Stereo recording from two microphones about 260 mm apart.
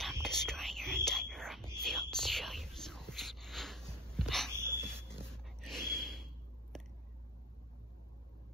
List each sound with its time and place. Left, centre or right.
0.0 s whispering: centre
4.2 s a sound: centre
5.0 s snort: centre